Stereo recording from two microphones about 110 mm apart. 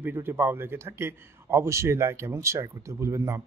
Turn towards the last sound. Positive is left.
turn(degrees=-25)  # may be behind; listen again after turning